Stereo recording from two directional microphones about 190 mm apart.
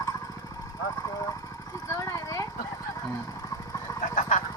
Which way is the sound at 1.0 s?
20° left (ahead or behind).